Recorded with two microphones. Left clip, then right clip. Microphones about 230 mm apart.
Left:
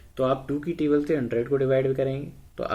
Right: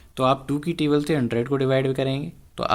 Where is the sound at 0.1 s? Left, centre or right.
Right.